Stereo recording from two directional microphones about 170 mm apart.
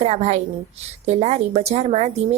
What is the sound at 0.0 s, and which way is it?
Speech, 40° right (ahead or behind).